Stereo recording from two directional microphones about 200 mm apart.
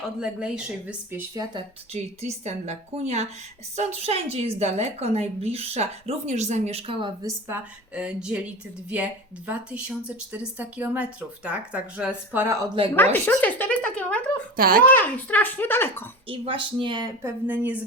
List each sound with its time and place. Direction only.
0.2 s speech: 5° right (ahead or behind)
1.4 s a woman's voice: 30° right (ahead or behind); by 12.5 s 10° right (ahead or behind)
12.8 s speech: 25° right (ahead or behind)
13.1 s a child's voice: 10° left (ahead or behind)
14.5 s a child's voice: 45° right (ahead or behind)
14.8 s a child's voice: 10° left (ahead or behind)
16.2 s speech: 25° right (ahead or behind)
17.4 s speech: 10° right (ahead or behind)